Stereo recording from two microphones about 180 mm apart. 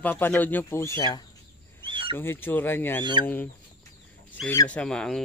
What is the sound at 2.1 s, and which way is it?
Speech, 10° left (ahead or behind).